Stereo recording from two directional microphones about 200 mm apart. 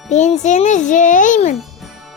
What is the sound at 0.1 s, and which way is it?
A child's voice, 35° left (ahead or behind).